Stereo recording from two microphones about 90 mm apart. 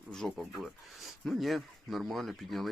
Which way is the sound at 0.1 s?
5° left (ahead or behind).